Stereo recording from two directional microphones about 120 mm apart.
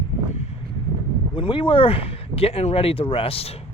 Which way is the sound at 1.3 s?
45° left (ahead or behind).